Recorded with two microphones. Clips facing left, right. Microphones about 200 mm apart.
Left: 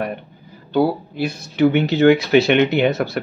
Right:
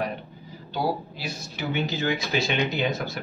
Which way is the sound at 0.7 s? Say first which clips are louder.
Left 10 dB; 60° left (ahead or behind).